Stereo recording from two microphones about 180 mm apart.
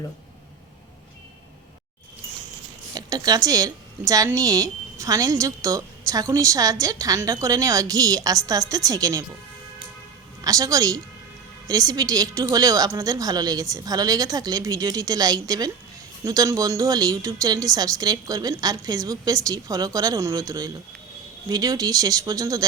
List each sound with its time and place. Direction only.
2.9 s a woman's voice: 20° right (ahead or behind)
10.4 s a woman's voice: 20° right (ahead or behind)